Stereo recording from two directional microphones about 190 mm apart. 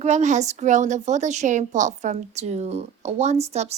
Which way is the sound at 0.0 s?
35° right (ahead or behind).